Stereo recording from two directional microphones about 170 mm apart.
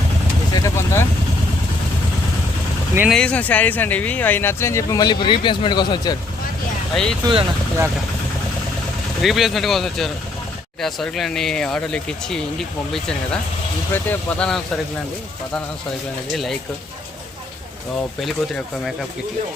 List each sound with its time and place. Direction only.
0.5 s speech: 20° left (ahead or behind)
3.1 s speech: 5° left (ahead or behind); by 6.1 s 25° left (ahead or behind)
6.9 s speech: centre (ahead or behind)
9.2 s speech: centre (ahead or behind)
16.3 s speech: centre (ahead or behind)
18.2 s speech: centre (ahead or behind)